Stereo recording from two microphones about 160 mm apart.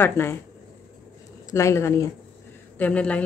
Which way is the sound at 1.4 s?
20° left (ahead or behind).